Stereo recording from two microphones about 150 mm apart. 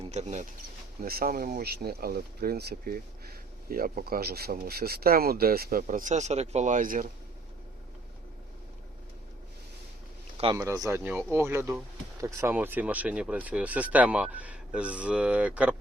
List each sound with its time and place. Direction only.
0.1 s speech: 50° right (ahead or behind)
1.0 s speech: 80° right; by 7.1 s 65° right (ahead or behind)
10.5 s speech: 20° right (ahead or behind)